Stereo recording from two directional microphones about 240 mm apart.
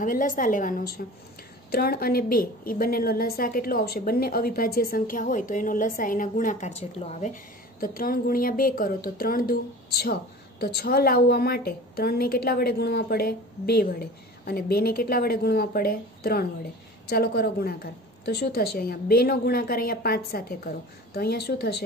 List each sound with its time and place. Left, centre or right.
0.0 s a woman's voice: left